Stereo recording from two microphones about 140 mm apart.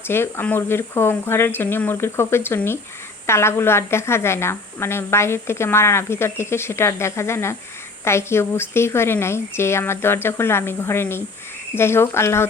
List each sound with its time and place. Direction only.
0.1 s a woman's voice: 15° left (ahead or behind)